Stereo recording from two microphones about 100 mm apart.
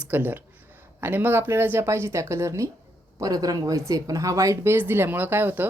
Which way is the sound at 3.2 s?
40° right (ahead or behind).